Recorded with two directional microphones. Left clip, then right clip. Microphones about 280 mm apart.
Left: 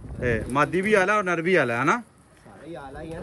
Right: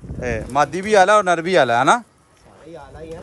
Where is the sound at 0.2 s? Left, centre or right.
Centre.